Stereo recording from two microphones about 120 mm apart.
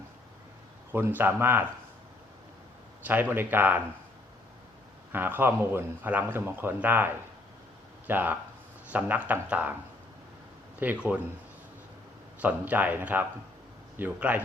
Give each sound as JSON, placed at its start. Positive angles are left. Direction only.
{"t": 0.9, "sound": "a man's voice", "side_deg": -15}
{"t": 3.0, "sound": "a man's voice", "side_deg": -15}
{"t": 5.1, "sound": "a man's voice", "side_deg": -15}
{"t": 10.8, "sound": "speech", "side_deg": -10}
{"t": 12.4, "sound": "a man's voice", "side_deg": -15}